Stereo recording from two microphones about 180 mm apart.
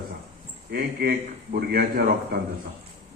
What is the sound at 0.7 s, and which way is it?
Speech, 60° right (ahead or behind).